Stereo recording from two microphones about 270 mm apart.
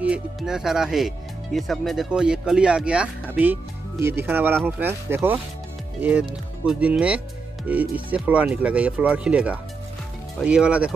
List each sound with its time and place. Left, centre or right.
0.0 s speech: centre